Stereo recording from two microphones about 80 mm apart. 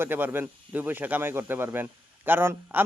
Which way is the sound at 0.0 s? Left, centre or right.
Right.